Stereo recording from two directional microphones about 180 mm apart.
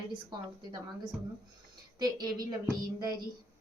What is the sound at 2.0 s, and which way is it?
Speech, 20° right (ahead or behind).